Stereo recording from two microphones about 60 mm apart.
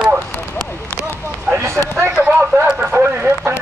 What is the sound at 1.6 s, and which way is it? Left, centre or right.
Run, right.